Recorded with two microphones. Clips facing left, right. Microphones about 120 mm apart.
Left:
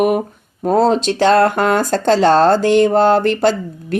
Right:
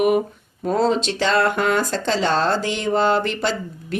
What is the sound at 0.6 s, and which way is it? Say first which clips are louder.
Speech: left 6 dB; 45° left (ahead or behind).